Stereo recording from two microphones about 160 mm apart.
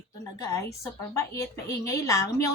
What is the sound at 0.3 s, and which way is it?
A woman's voice, 20° left (ahead or behind).